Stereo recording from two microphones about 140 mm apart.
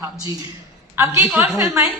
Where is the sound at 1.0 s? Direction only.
20° right (ahead or behind).